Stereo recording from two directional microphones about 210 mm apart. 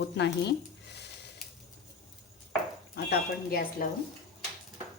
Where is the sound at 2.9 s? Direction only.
50° left (ahead or behind).